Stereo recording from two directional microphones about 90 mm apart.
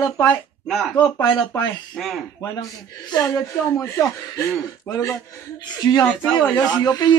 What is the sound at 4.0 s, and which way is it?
Speech, 40° left (ahead or behind).